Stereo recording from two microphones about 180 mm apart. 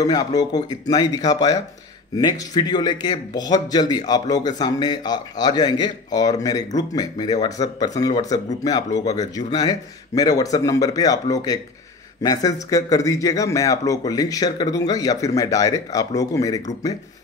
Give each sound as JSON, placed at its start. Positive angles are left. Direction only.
{"t": 0.0, "sound": "a man's voice", "side_deg": 20}